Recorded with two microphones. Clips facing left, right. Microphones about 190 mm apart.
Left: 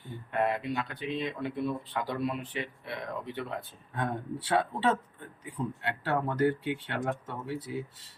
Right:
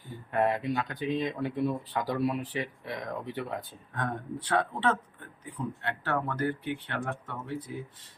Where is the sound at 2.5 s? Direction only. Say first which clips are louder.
Right 2 dB; 40° right (ahead or behind).